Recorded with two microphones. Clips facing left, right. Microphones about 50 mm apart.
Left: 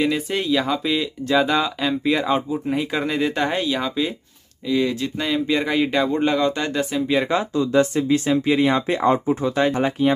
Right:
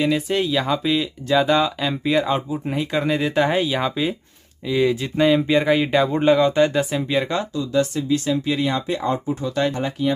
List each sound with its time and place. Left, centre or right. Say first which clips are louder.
0.0 s speech: right 1 dB; centre
7.5 s speech: left 4 dB; left